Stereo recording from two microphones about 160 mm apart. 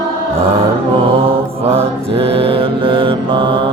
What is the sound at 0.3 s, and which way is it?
Mantra, 35° right (ahead or behind).